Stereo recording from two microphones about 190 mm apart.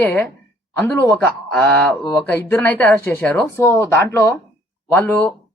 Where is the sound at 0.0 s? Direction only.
10° left (ahead or behind).